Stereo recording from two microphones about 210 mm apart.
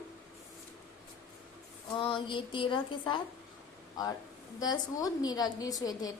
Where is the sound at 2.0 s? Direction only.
25° left (ahead or behind).